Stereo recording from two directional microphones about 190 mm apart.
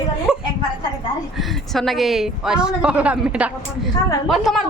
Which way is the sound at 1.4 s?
Centre (ahead or behind).